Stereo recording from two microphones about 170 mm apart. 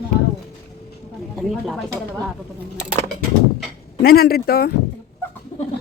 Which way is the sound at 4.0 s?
65° left (ahead or behind).